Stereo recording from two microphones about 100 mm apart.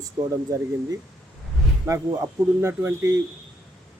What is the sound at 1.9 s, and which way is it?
Speech, 35° right (ahead or behind).